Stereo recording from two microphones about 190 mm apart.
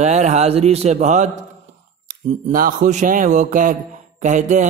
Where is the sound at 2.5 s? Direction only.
45° right (ahead or behind).